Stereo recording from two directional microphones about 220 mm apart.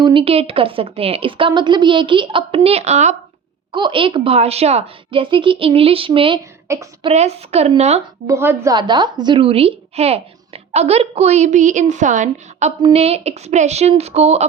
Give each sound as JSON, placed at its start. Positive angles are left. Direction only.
{"t": 0.0, "sound": "a woman's voice", "side_deg": -25}
{"t": 7.1, "sound": "a woman's voice", "side_deg": -30}
{"t": 8.3, "sound": "a woman's voice", "side_deg": -10}